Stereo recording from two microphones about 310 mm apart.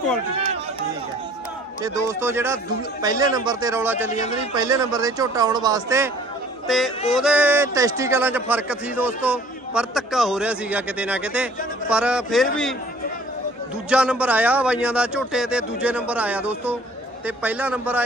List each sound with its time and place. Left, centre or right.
1.8 s a man's voice: centre
4.1 s a man's voice: centre
4.5 s a man's voice: centre
6.7 s a man's voice: centre
13.9 s a man's voice: centre